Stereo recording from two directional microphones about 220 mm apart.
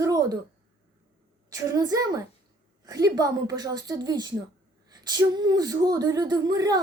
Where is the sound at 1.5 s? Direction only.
15° right (ahead or behind).